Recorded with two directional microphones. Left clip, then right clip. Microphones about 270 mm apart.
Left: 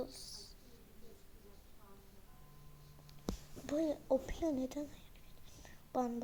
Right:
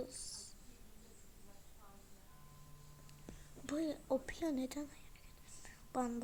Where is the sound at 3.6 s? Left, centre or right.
Centre.